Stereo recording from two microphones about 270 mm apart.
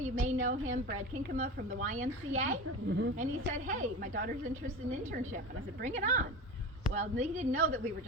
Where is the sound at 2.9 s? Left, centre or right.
Right.